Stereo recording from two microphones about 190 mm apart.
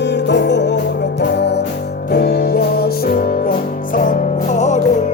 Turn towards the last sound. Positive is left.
turn(degrees=40)  # may be behind; listen again after turning